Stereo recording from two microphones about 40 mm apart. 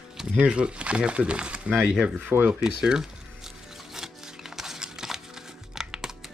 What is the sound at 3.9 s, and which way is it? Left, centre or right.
Music, centre.